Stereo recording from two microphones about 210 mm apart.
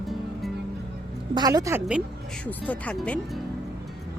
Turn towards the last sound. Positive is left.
turn(degrees=5)  # may be behind; listen again after turning